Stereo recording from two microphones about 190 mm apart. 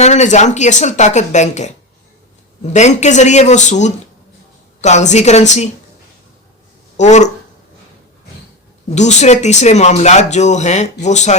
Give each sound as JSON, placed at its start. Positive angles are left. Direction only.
{"t": 0.0, "sound": "speech", "side_deg": 35}
{"t": 2.7, "sound": "speech", "side_deg": 35}
{"t": 6.9, "sound": "speech", "side_deg": 40}
{"t": 9.0, "sound": "speech", "side_deg": 35}